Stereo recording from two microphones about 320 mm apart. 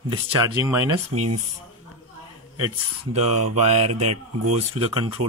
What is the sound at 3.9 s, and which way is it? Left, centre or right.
Speech, right.